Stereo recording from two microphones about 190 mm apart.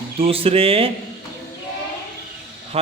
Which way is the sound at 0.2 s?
30° right (ahead or behind).